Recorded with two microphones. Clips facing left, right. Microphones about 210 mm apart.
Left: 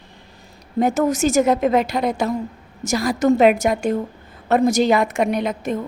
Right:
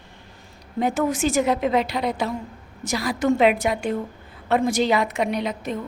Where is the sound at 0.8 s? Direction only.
45° left (ahead or behind).